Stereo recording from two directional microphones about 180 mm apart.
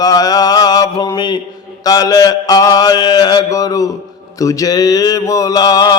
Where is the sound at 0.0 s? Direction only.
20° left (ahead or behind).